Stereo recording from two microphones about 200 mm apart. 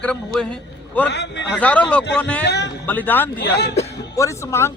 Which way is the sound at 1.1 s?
60° left (ahead or behind).